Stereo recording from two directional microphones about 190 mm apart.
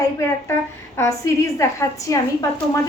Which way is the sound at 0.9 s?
15° left (ahead or behind).